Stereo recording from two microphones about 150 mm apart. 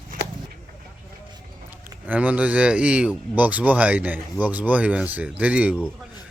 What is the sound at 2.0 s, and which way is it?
A man's voice, 10° right (ahead or behind).